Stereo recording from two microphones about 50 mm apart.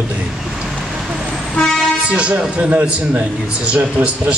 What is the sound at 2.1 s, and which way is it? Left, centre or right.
Speech, right.